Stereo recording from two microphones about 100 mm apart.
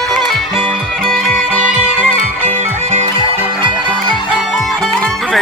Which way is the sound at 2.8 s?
90° right.